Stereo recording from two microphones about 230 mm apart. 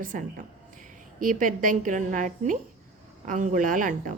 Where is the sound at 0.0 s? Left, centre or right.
Right.